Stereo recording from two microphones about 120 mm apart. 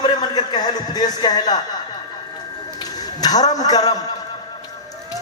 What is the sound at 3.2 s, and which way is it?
Speech, 35° left (ahead or behind).